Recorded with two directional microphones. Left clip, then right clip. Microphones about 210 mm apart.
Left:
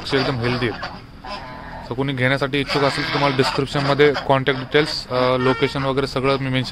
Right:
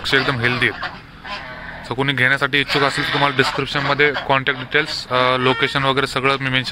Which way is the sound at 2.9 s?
50° left (ahead or behind).